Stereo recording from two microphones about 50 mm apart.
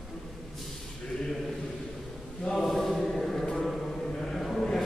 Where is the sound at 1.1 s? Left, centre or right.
Centre.